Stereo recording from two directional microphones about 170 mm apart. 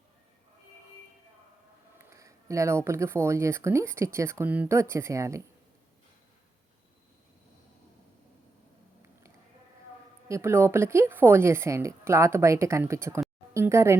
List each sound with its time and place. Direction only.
2.0 s speech: 15° right (ahead or behind)
10.2 s speech: 15° right (ahead or behind)